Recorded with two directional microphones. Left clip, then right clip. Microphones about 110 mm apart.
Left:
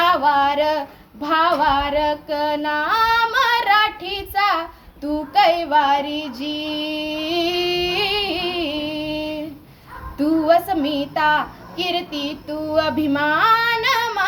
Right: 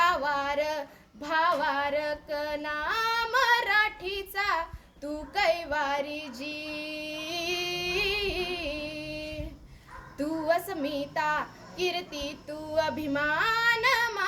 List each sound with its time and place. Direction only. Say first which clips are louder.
0.0 s female singing: left 10 dB; 35° right (ahead or behind)
5.3 s child singing: left 12 dB; 40° right (ahead or behind)
10.2 s a woman's voice: left 12 dB; 40° right (ahead or behind)
12.7 s female singing: left 9 dB; 40° right (ahead or behind)